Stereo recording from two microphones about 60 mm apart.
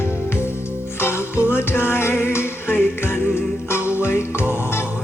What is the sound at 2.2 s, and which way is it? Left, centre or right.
Singing, left.